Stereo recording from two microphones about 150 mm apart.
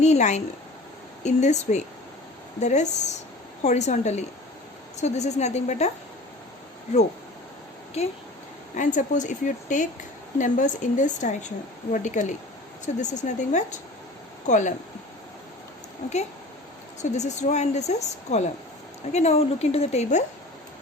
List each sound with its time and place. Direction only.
0.0 s a woman's voice: 50° left (ahead or behind)
8.8 s a woman's voice: 55° left (ahead or behind)
17.0 s a woman's voice: 50° left (ahead or behind)